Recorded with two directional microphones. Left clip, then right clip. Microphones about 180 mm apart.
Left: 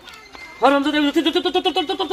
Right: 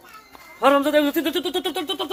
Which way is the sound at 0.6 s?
15° right (ahead or behind).